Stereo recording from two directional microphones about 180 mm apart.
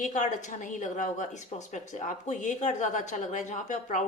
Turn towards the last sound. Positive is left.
turn(degrees=45)  # may be behind; listen again after turning